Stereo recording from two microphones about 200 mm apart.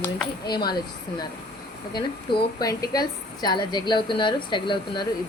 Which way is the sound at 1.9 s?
20° left (ahead or behind).